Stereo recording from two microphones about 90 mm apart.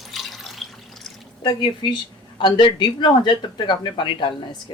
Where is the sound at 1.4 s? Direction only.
55° left (ahead or behind).